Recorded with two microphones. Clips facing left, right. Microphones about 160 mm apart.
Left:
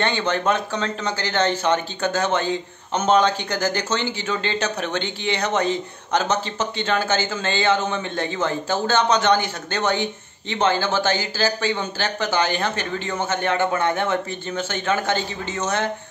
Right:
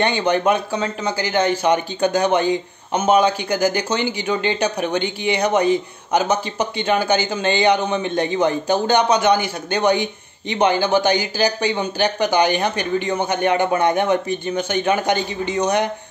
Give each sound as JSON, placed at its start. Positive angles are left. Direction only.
{"t": 0.0, "sound": "a man's voice", "side_deg": -15}